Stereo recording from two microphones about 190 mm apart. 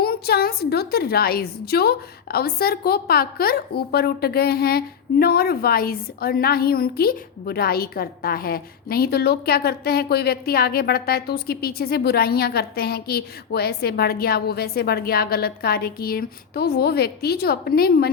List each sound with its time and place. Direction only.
0.0 s a woman's voice: 55° left (ahead or behind)